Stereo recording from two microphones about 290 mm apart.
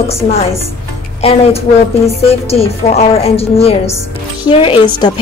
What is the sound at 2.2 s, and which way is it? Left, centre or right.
A woman's voice, left.